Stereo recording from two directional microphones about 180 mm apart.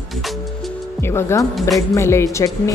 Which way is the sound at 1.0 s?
15° left (ahead or behind).